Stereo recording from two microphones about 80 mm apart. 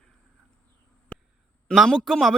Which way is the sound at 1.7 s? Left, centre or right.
Centre.